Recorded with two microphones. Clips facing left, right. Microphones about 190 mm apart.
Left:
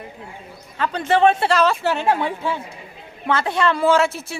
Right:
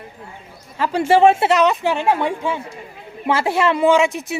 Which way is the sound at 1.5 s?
20° right (ahead or behind).